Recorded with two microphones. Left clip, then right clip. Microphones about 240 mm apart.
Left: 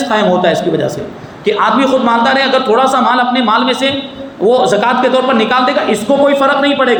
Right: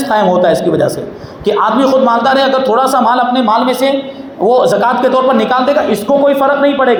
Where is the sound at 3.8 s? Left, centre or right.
Centre.